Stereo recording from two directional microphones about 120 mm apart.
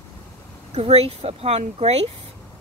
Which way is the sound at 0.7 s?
55° right (ahead or behind).